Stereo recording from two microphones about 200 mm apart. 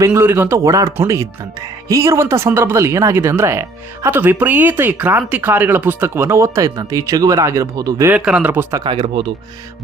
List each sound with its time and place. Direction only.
0.0 s speech: 10° right (ahead or behind)
8.8 s speech: 25° right (ahead or behind)